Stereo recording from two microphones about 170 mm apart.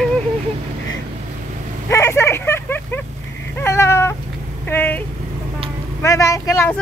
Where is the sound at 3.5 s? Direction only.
15° left (ahead or behind).